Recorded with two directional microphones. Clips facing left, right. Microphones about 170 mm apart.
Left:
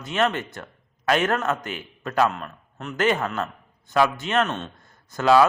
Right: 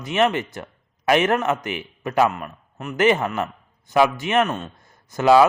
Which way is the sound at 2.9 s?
20° right (ahead or behind).